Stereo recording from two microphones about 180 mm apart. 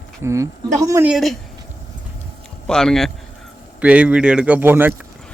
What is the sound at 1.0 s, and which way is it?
Speech, centre (ahead or behind).